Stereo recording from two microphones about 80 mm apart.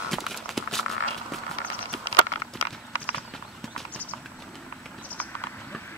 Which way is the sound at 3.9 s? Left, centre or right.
Centre.